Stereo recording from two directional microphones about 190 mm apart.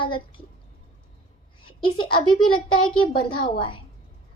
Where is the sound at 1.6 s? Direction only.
25° left (ahead or behind).